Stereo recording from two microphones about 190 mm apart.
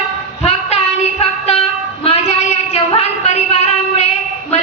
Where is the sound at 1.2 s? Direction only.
35° left (ahead or behind).